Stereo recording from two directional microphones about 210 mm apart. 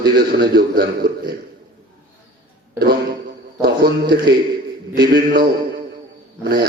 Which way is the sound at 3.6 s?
45° right (ahead or behind).